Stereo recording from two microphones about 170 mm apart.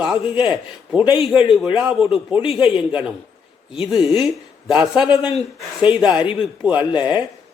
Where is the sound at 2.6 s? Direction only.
30° left (ahead or behind).